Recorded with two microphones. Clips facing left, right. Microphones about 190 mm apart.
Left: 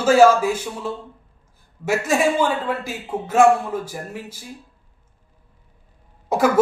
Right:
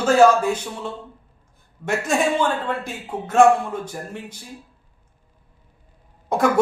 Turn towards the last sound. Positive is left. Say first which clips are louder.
# left 1 dB
turn(degrees=5)  # may be behind; listen again after turning